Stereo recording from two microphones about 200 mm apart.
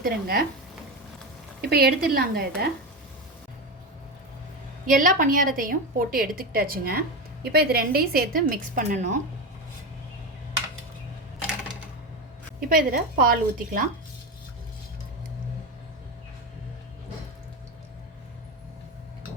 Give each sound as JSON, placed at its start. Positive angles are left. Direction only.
{"t": 0.0, "sound": "a woman's voice", "side_deg": -45}
{"t": 1.6, "sound": "a woman's voice", "side_deg": -50}
{"t": 4.9, "sound": "a woman's voice", "side_deg": -40}
{"t": 12.5, "sound": "a woman's voice", "side_deg": -45}